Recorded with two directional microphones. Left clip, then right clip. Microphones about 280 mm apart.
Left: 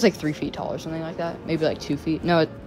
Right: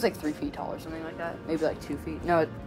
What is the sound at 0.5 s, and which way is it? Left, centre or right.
Speech, left.